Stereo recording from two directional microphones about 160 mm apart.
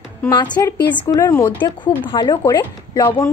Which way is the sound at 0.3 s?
25° left (ahead or behind).